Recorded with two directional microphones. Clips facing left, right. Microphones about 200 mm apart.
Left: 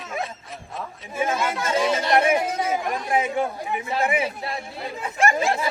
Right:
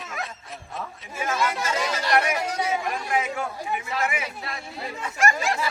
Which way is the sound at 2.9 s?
30° left (ahead or behind).